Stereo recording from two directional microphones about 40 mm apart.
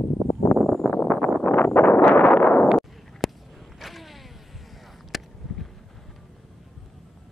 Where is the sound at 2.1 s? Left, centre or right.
Left.